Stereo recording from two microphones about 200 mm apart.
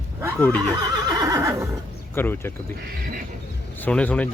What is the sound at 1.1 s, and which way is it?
Neigh, 15° right (ahead or behind).